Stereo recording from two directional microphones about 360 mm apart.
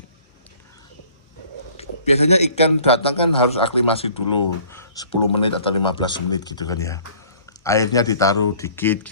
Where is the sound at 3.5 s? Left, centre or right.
Centre.